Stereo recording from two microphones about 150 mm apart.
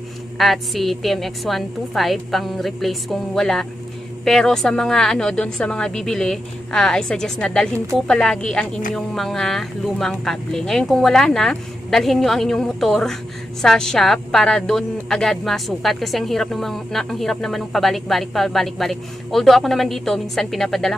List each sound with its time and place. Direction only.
0.4 s speech: centre (ahead or behind)
7.7 s speech: 20° right (ahead or behind)
8.1 s speech: 5° left (ahead or behind)